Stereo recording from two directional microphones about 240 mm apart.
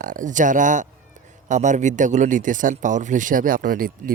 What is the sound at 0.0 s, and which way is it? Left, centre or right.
Speech, right.